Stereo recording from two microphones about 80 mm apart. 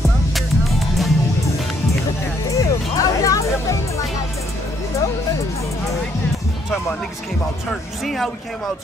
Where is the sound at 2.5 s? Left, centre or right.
Left.